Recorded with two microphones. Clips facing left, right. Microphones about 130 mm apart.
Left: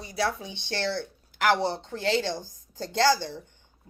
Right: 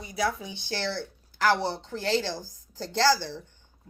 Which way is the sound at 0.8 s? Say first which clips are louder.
Left 3 dB; 55° left (ahead or behind).